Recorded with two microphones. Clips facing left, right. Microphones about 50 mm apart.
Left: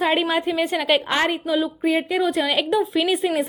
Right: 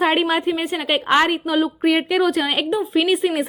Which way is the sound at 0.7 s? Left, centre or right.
Right.